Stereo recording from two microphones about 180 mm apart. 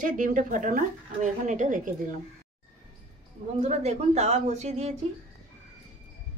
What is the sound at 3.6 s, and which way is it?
Speech, 40° right (ahead or behind).